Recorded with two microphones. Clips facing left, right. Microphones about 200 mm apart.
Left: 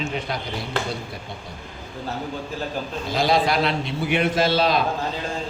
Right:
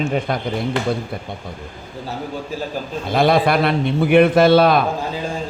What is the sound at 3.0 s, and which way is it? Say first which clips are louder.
A man's voice: right 5 dB; 55° right (ahead or behind).